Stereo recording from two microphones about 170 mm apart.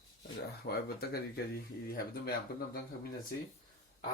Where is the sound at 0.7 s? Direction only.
65° left (ahead or behind).